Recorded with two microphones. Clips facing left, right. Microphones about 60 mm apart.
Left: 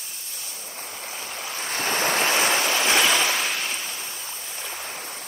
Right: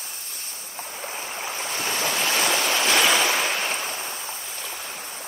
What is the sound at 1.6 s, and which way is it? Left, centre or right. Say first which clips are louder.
Waves: left 3 dB; left.